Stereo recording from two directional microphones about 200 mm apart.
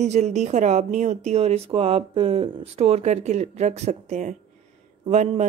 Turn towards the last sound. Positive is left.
turn(degrees=-35)  # may be behind; listen again after turning